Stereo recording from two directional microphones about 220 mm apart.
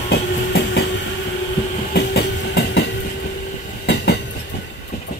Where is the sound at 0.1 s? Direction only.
50° left (ahead or behind).